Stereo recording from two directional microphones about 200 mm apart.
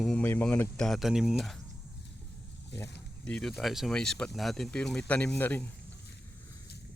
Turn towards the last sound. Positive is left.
turn(degrees=10)  # may be behind; listen again after turning